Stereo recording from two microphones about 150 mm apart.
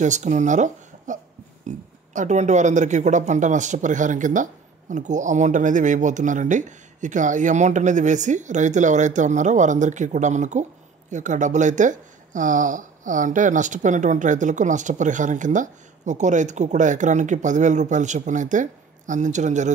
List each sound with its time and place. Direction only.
0.0 s speech: 55° right (ahead or behind)
1.7 s a sound: 55° right (ahead or behind)
2.1 s speech: 50° right (ahead or behind)